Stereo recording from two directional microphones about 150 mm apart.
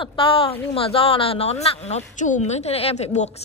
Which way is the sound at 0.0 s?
35° left (ahead or behind).